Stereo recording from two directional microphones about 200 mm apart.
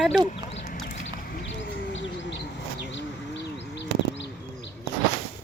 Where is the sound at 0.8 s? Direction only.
45° left (ahead or behind); by 2.4 s 65° left (ahead or behind).